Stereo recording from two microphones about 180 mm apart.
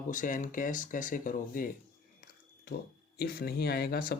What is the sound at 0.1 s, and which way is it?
Speech, 45° left (ahead or behind).